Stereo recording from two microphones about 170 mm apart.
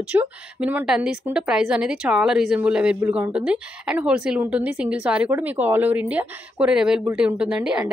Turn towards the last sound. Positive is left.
turn(degrees=-5)  # may be behind; listen again after turning